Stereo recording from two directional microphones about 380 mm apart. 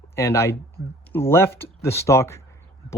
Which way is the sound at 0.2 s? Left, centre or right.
Centre.